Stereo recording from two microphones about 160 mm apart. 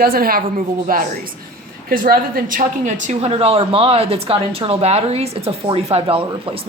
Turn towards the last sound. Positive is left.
turn(degrees=-35)  # may be behind; listen again after turning